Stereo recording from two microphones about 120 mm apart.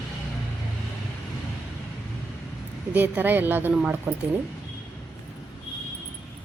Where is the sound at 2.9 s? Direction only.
15° right (ahead or behind).